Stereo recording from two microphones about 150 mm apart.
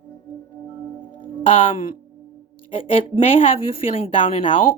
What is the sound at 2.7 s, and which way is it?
Speech, 40° left (ahead or behind).